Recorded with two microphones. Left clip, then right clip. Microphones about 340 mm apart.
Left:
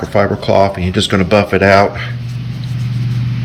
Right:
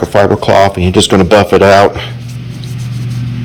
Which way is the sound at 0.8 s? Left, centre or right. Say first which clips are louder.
Right 6 dB; centre.